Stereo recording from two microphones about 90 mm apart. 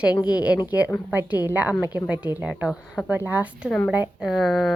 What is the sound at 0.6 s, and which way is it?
A woman's voice, 20° right (ahead or behind).